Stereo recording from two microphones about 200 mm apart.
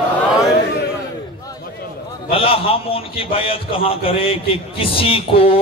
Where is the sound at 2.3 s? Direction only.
25° left (ahead or behind).